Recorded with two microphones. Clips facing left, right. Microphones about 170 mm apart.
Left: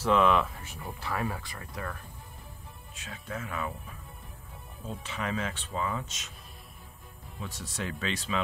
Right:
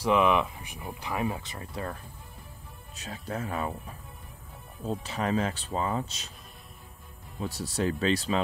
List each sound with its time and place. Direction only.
0.0 s speech: 15° right (ahead or behind)
2.9 s speech: 40° right (ahead or behind)
4.8 s speech: 35° right (ahead or behind)
7.4 s speech: 35° right (ahead or behind)